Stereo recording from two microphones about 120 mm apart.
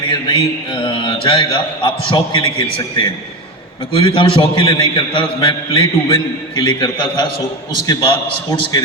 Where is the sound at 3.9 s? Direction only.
45° left (ahead or behind).